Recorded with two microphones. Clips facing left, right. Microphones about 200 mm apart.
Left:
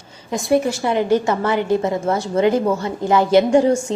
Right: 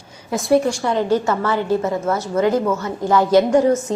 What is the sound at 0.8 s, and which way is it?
A woman's voice, 15° left (ahead or behind).